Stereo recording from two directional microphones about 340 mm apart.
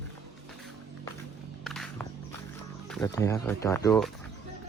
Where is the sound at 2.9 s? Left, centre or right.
Centre.